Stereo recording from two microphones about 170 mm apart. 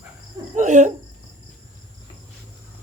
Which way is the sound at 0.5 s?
45° right (ahead or behind).